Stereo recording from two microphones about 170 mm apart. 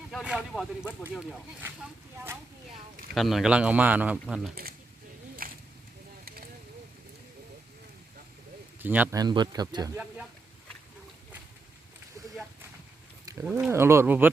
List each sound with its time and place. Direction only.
0.1 s speech: centre (ahead or behind)
2.1 s speech: 15° right (ahead or behind)
3.2 s speech: centre (ahead or behind)
5.4 s a sound: 60° right (ahead or behind)
8.8 s speech: 10° right (ahead or behind)
9.1 s speech: 25° right (ahead or behind)
13.4 s speech: 10° right (ahead or behind)